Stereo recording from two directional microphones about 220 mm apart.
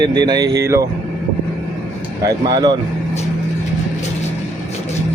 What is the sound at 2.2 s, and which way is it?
Speech, 20° right (ahead or behind).